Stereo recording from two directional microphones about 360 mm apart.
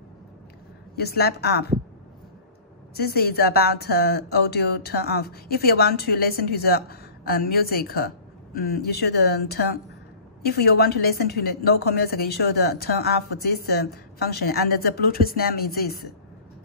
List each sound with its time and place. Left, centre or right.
0.9 s a woman's voice: left
3.0 s a woman's voice: left